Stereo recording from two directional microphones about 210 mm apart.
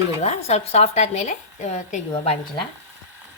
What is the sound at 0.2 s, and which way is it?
Speech, 30° left (ahead or behind).